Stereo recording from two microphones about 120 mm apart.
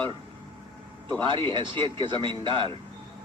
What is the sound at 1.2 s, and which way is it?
Speech, 45° right (ahead or behind).